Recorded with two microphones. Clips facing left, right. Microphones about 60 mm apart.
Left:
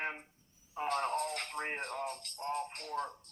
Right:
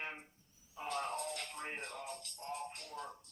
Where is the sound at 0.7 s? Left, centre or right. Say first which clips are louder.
Left 6 dB; left.